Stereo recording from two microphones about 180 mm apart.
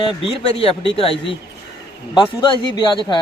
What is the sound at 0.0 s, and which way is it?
Speech, 30° left (ahead or behind).